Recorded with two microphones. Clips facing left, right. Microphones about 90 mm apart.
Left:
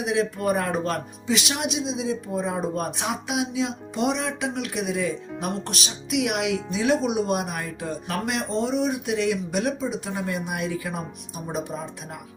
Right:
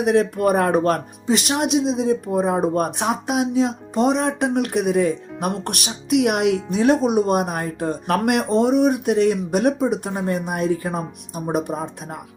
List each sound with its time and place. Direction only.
0.0 s speech: 55° right (ahead or behind)